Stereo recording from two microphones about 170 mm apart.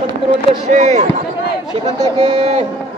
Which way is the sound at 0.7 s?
45° right (ahead or behind).